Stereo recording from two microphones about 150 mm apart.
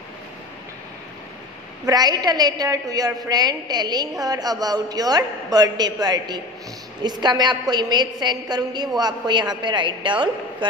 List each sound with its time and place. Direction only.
1.9 s a woman's voice: 25° right (ahead or behind)